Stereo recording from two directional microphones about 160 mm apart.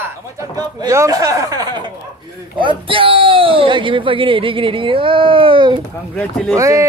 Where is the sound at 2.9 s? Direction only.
35° right (ahead or behind).